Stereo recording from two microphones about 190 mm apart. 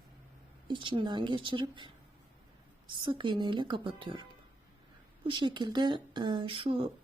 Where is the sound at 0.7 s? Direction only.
25° right (ahead or behind).